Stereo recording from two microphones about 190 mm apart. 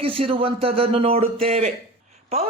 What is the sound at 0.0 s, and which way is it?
Speech, 30° right (ahead or behind).